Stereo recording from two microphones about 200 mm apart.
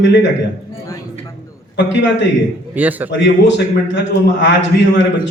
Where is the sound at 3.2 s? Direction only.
65° left (ahead or behind).